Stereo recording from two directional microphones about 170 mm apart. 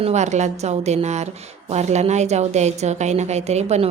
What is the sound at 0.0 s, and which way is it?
A woman's voice, 40° right (ahead or behind).